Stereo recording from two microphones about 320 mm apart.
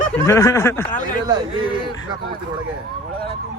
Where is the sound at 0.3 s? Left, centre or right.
Centre.